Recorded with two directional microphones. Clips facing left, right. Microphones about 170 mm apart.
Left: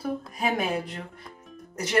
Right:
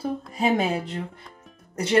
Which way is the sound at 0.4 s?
25° right (ahead or behind).